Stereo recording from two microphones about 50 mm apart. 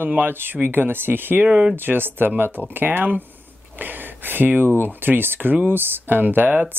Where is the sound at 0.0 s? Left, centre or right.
Right.